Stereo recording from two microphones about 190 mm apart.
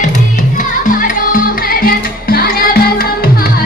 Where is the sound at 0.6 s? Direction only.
45° left (ahead or behind).